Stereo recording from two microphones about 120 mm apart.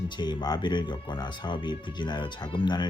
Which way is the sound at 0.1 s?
40° left (ahead or behind).